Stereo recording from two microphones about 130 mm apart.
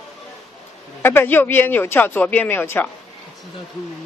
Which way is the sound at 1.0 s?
15° left (ahead or behind).